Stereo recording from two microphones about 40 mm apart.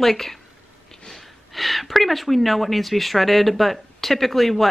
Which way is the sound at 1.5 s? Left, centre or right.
Centre.